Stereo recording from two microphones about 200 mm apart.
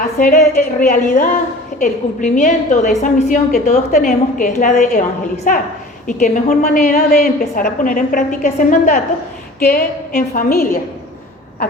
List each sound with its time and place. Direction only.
0.0 s a woman's voice: 45° left (ahead or behind)